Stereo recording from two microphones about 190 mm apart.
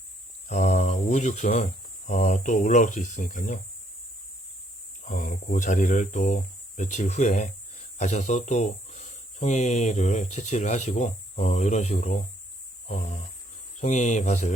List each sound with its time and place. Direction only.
0.4 s speech: 40° left (ahead or behind)
5.0 s speech: 40° left (ahead or behind)